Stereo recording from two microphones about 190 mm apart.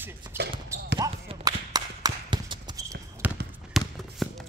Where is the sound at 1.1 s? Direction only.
30° right (ahead or behind).